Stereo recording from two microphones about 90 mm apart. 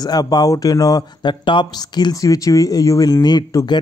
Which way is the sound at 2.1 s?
40° left (ahead or behind).